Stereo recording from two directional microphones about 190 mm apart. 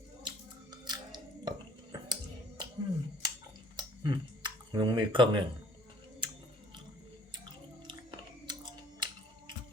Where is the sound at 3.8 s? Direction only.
25° right (ahead or behind).